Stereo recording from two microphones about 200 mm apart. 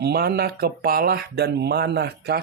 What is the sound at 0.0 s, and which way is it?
Speech, 50° right (ahead or behind).